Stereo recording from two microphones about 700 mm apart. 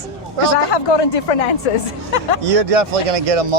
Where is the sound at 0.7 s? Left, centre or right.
Left.